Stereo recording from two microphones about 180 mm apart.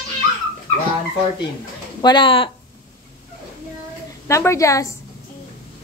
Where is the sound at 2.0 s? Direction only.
25° left (ahead or behind).